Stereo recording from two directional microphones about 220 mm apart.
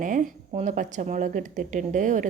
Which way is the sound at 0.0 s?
35° right (ahead or behind).